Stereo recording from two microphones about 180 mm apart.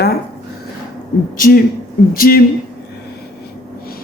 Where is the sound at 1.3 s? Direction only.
50° left (ahead or behind).